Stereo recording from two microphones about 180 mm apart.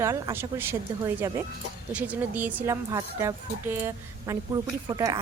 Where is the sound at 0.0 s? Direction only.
15° right (ahead or behind).